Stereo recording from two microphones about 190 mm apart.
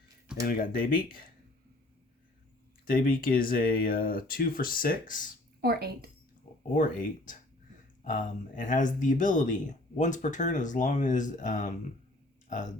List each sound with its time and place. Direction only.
0.4 s speech: 50° left (ahead or behind)
2.8 s speech: 50° left (ahead or behind)
5.6 s a woman's voice: 55° right (ahead or behind)
6.7 s speech: 45° left (ahead or behind)